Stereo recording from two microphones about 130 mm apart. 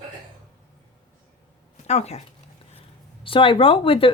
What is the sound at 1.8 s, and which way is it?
Speech, 55° left (ahead or behind).